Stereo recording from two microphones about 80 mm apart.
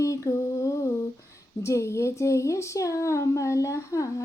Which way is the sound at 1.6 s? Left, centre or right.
Left.